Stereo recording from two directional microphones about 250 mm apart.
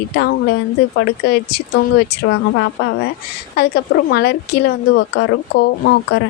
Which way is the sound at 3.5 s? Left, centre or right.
Left.